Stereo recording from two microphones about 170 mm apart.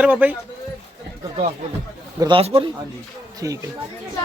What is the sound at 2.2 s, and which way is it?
Speech, 30° right (ahead or behind).